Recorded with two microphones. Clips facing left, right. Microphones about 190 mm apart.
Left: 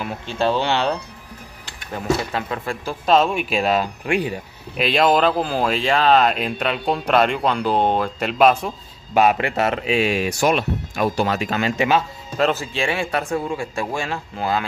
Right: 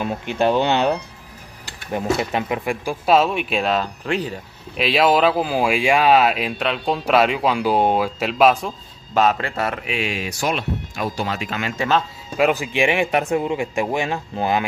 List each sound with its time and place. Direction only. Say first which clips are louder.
0.0 s speech: right 2 dB; 20° right (ahead or behind); by 4.4 s 10° left (ahead or behind)
4.7 s speech: even; 5° right (ahead or behind)
9.1 s speech: left 2 dB; 15° left (ahead or behind); by 11.7 s 40° left (ahead or behind)
12.4 s speech: right 2 dB; 15° right (ahead or behind)